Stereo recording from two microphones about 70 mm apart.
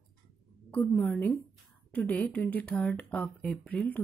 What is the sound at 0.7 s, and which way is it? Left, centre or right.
A woman's voice, left.